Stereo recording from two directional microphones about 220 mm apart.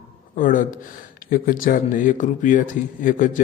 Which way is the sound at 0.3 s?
40° left (ahead or behind).